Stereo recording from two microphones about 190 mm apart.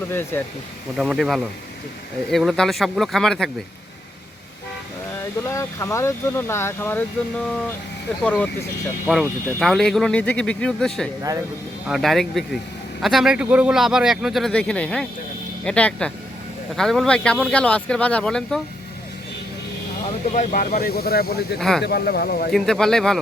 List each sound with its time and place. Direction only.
0.1 s speech: 10° left (ahead or behind)
0.9 s speech: centre (ahead or behind)
5.4 s speech: 15° left (ahead or behind)
9.0 s speech: 5° right (ahead or behind)
11.2 s speech: 20° right (ahead or behind)
11.9 s speech: centre (ahead or behind)
20.3 s speech: 40° left (ahead or behind)
21.6 s speech: centre (ahead or behind)
21.8 s speech: 55° left (ahead or behind)
22.5 s speech: 5° left (ahead or behind)